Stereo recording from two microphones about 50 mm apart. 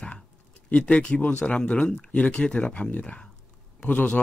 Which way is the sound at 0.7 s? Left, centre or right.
Left.